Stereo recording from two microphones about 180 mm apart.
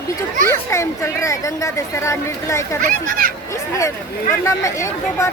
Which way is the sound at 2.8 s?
50° right (ahead or behind).